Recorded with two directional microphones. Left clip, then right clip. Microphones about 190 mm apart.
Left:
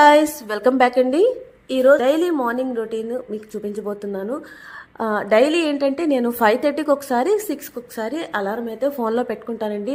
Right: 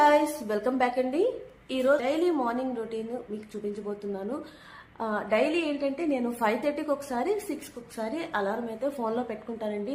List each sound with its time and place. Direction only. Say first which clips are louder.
0.0 s a woman's voice: left 9 dB; 40° left (ahead or behind)
1.7 s a woman's voice: left 10 dB; 35° left (ahead or behind)